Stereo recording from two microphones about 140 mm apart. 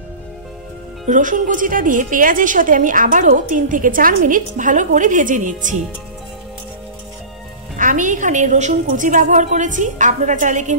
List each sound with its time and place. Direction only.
1.0 s a woman's voice: 65° right (ahead or behind)
7.7 s a woman's voice: 65° right (ahead or behind)